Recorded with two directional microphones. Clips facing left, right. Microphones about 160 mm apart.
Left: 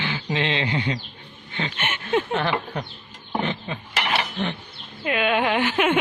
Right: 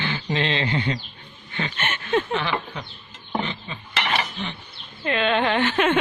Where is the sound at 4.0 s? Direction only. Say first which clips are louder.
Even; 5° left (ahead or behind).